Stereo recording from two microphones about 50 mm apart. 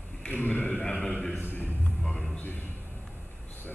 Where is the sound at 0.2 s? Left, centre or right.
Left.